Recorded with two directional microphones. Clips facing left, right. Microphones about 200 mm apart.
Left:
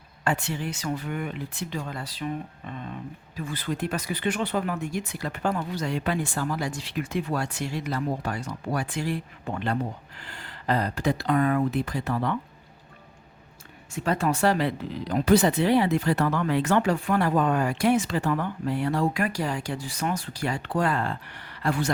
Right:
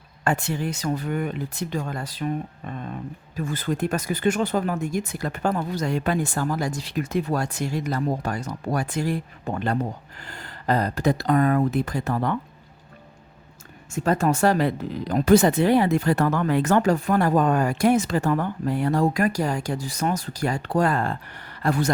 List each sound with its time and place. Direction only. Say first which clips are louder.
0.3 s speech: right 3 dB; 45° right (ahead or behind)
13.9 s speech: right 4 dB; 45° right (ahead or behind)